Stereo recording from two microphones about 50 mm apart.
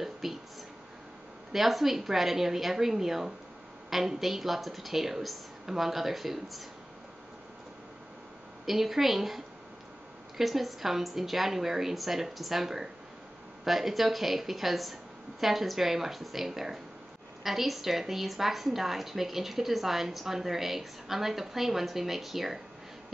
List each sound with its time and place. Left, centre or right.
0.0 s a sound: centre
1.5 s a woman's voice: centre
8.6 s a woman's voice: centre